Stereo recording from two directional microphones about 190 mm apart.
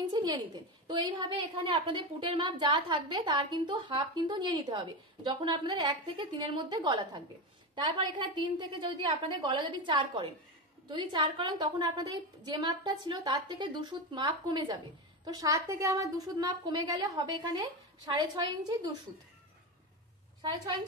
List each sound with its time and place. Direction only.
0.0 s a sound: 20° right (ahead or behind)
0.8 s a woman's voice: 25° right (ahead or behind)
20.4 s a woman's voice: 25° right (ahead or behind)